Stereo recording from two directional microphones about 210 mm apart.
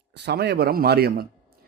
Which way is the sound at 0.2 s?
50° right (ahead or behind).